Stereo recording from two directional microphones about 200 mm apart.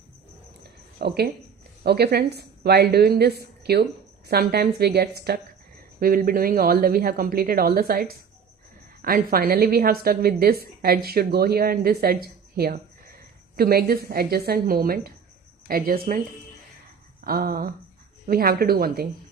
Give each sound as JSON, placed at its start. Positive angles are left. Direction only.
{"t": 0.9, "sound": "a woman's voice", "side_deg": -55}